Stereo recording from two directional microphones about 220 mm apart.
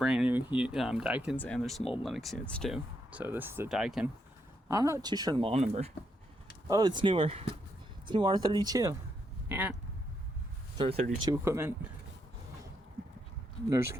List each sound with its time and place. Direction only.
0.0 s speech: 5° right (ahead or behind)
4.7 s speech: 15° right (ahead or behind)
6.7 s speech: 15° right (ahead or behind)
10.8 s speech: 25° right (ahead or behind)
11.3 s speech: 10° right (ahead or behind)
13.7 s speech: 10° right (ahead or behind)